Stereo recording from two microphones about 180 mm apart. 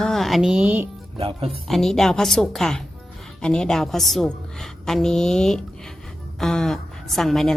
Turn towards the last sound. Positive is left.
turn(degrees=0)  # may be behind; listen again after turning